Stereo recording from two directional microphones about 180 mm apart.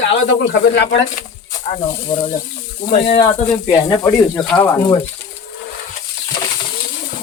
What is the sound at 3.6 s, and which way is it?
Speech, 20° left (ahead or behind).